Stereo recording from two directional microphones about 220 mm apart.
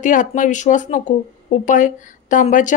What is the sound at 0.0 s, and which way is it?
Speech, 35° left (ahead or behind).